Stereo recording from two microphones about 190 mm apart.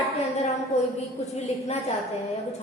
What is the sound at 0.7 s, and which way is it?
Speech, 35° left (ahead or behind).